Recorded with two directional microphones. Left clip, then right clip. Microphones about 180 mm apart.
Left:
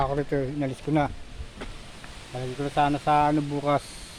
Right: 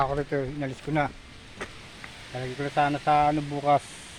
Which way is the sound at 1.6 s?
50° right (ahead or behind).